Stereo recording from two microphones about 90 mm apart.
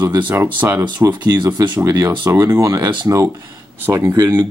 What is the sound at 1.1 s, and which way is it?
Speech, 50° right (ahead or behind).